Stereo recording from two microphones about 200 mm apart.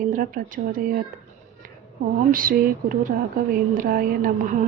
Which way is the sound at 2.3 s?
45° right (ahead or behind).